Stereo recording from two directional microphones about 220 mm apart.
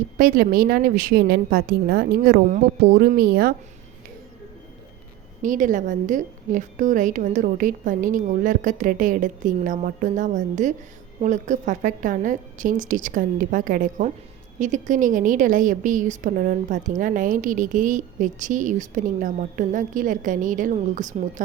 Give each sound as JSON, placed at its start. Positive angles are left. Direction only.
{"t": 0.2, "sound": "a woman's voice", "side_deg": -40}
{"t": 5.4, "sound": "a woman's voice", "side_deg": -35}